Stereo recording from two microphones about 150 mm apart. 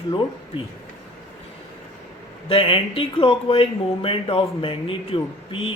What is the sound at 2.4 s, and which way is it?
Speech, 35° left (ahead or behind).